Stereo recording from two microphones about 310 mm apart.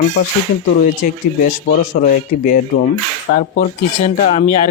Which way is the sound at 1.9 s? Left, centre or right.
Left.